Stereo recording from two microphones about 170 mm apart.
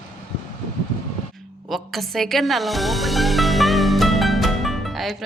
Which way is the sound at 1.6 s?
Centre (ahead or behind).